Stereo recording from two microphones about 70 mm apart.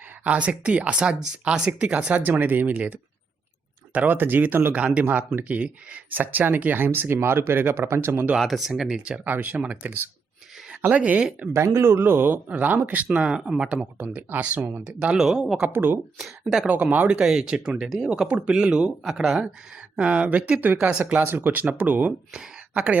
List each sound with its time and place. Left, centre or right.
0.3 s speech: centre
2.3 s speech: right
4.7 s speech: centre; by 8.3 s right
8.4 s speech: centre
11.5 s a man's voice: right; by 13.8 s centre
14.1 s speech: right
14.8 s speech: centre
15.6 s speech: right
17.2 s speech: centre
19.0 s speech: centre
20.0 s speech: centre
20.7 s speech: centre
21.2 s speech: right
22.3 s speech: centre